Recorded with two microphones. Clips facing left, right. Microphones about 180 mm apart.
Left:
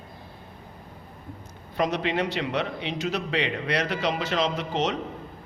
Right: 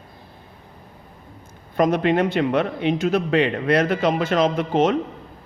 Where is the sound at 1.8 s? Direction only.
50° right (ahead or behind).